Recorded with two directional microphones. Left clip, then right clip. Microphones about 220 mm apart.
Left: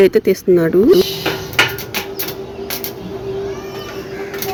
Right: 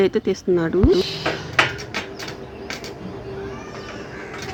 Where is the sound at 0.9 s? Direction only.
15° right (ahead or behind).